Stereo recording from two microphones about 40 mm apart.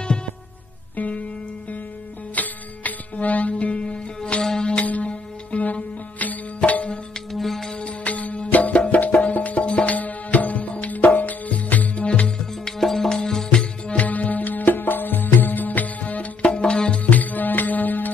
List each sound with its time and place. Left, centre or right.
0.9 s music: left
2.3 s music: left
4.2 s music: centre
4.7 s music: left
7.3 s music: centre
7.8 s music: left
9.9 s music: left
12.6 s music: centre
13.9 s music: left
17.1 s music: left